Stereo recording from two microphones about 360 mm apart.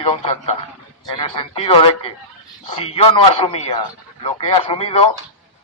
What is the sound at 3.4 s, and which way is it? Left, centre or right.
A man's voice, centre.